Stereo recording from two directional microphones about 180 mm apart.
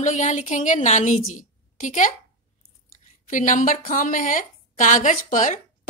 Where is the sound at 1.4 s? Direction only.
45° left (ahead or behind).